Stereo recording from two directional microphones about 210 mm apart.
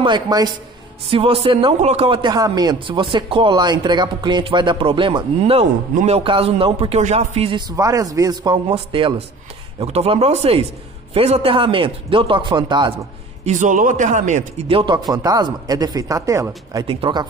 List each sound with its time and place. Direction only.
0.0 s speech: 20° right (ahead or behind)
13.5 s speech: 35° right (ahead or behind)